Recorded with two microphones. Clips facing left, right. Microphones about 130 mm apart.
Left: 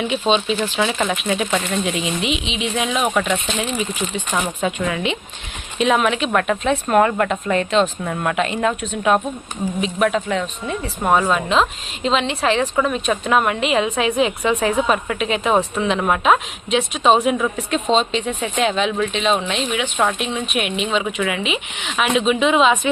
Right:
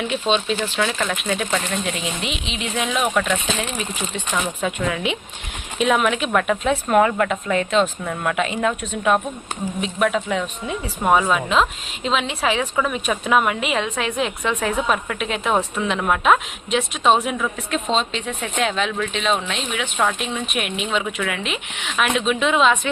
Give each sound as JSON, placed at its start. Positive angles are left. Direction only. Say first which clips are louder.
{"t": 0.0, "sound": "a woman's voice", "louder": "left 2 dB", "side_deg": 5}